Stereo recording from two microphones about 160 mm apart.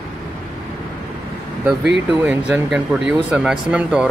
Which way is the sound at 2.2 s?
10° right (ahead or behind).